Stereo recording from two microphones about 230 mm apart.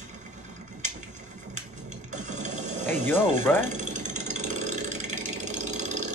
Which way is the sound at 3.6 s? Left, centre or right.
Right.